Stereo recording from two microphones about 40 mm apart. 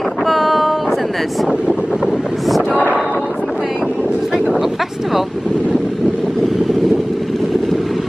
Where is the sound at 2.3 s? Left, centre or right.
Centre.